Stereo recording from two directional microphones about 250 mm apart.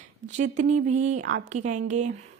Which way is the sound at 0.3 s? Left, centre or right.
Right.